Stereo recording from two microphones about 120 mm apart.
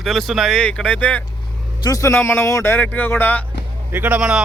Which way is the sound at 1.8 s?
30° left (ahead or behind).